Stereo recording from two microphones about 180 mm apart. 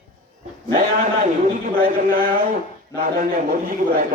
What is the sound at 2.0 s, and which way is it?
Speech, 55° right (ahead or behind).